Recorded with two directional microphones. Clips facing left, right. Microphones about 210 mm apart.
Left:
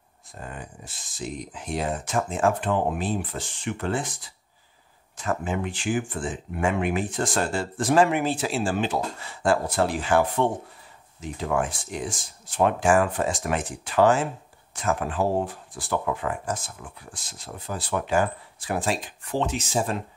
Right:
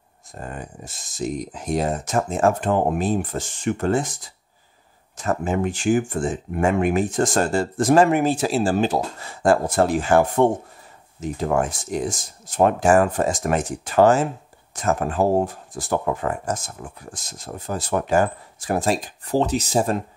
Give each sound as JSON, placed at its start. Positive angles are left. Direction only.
{"t": 0.3, "sound": "speech", "side_deg": -45}